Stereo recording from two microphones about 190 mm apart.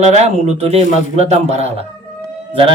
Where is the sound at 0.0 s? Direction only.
35° right (ahead or behind).